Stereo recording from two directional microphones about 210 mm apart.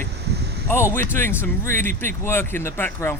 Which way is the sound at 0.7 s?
10° left (ahead or behind).